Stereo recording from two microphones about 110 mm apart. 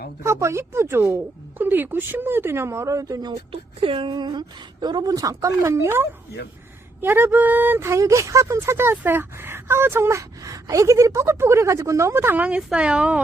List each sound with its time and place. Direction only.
0.2 s speech: 25° right (ahead or behind)
3.5 s a woman's voice: 55° right (ahead or behind); by 13.1 s 10° right (ahead or behind)